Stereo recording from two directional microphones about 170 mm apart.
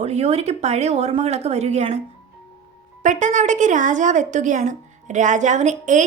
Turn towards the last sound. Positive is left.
turn(degrees=-45)  # may be behind; listen again after turning